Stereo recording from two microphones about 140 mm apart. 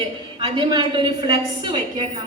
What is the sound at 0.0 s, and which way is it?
A woman's voice, 35° right (ahead or behind).